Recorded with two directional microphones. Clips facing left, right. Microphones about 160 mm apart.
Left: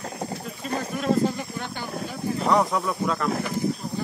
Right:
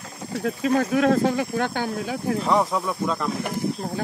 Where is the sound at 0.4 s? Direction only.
85° right.